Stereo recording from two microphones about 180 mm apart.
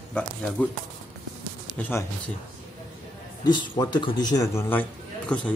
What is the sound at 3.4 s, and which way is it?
A man's voice, 25° left (ahead or behind).